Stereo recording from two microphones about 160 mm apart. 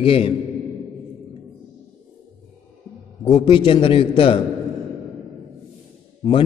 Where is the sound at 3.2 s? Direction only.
30° left (ahead or behind).